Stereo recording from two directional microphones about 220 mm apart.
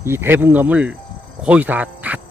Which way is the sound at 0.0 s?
10° right (ahead or behind).